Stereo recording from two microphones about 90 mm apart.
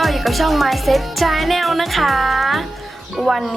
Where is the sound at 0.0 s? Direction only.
Centre (ahead or behind).